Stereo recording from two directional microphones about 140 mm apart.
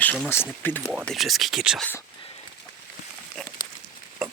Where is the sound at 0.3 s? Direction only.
15° left (ahead or behind).